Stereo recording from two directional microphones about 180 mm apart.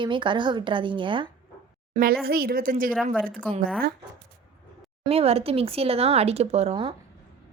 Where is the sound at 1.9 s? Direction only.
50° right (ahead or behind).